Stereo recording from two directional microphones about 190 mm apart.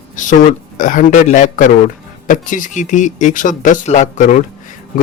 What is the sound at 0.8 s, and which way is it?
Speech, 45° left (ahead or behind).